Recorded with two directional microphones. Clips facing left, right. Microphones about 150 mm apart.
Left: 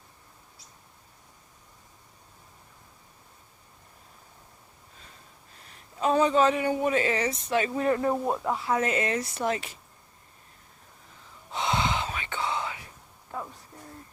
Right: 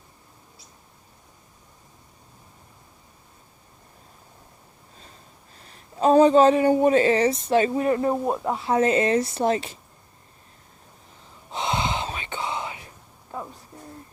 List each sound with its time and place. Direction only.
5.6 s speech: 35° right (ahead or behind)
11.5 s gasp: 20° right (ahead or behind)